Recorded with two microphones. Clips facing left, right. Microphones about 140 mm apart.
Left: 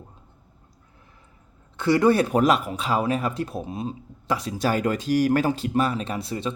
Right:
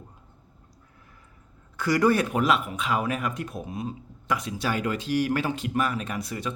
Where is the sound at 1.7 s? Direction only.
25° left (ahead or behind).